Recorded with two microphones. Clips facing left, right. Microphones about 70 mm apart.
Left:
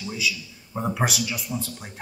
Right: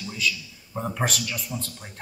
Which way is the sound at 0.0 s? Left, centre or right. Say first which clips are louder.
Even; centre.